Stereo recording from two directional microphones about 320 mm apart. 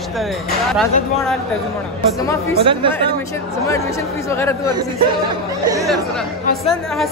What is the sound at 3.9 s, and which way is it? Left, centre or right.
Speech, centre.